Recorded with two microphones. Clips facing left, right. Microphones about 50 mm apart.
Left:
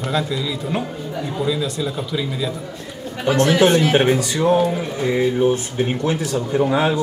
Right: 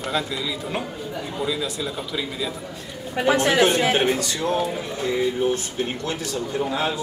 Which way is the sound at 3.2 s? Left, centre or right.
Centre.